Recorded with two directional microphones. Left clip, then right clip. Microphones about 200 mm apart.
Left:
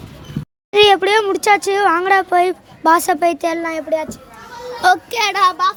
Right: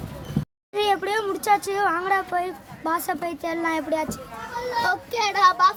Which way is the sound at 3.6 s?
10° left (ahead or behind).